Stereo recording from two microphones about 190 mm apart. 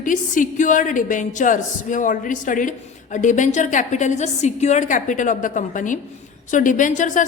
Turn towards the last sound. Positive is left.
turn(degrees=40)  # may be behind; listen again after turning